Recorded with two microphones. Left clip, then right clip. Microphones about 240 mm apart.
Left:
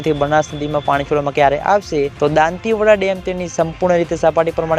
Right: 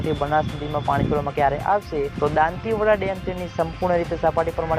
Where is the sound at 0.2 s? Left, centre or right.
Left.